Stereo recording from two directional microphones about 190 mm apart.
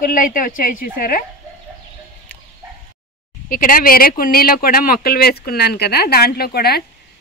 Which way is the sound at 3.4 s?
50° left (ahead or behind).